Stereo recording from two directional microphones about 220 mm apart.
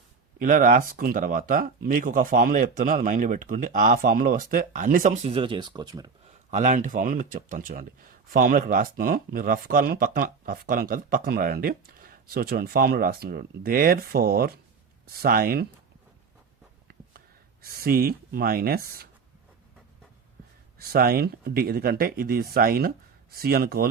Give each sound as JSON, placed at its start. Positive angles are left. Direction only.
{"t": 0.3, "sound": "speech", "side_deg": -35}
{"t": 6.5, "sound": "speech", "side_deg": -35}
{"t": 16.9, "sound": "a sound", "side_deg": -45}
{"t": 20.7, "sound": "speech", "side_deg": -45}